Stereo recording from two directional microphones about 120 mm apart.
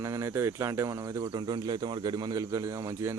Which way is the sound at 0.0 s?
25° right (ahead or behind).